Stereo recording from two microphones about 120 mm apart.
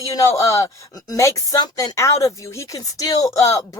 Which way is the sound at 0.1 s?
25° left (ahead or behind).